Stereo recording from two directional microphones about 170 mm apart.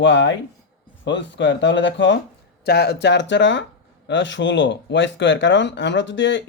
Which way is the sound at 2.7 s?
70° left (ahead or behind).